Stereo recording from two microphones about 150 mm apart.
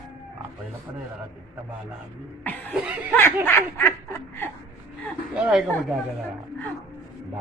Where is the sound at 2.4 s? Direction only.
10° left (ahead or behind).